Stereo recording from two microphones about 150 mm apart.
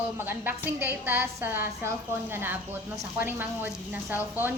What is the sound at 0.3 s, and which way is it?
A woman's voice, 15° right (ahead or behind).